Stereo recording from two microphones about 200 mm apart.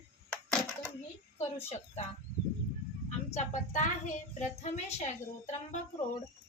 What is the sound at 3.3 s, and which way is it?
A child's voice, 40° left (ahead or behind).